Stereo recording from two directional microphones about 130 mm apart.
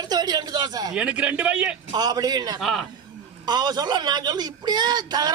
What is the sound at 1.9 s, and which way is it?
Speech, 30° right (ahead or behind).